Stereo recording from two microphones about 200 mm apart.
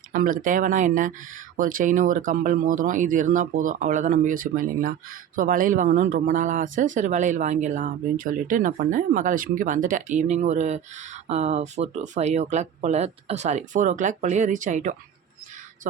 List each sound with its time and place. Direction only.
0.1 s speech: 40° right (ahead or behind)